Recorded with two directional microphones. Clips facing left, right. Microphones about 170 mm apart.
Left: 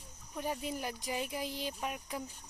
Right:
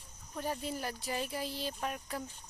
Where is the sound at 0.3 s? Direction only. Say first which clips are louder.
Even; 15° left (ahead or behind).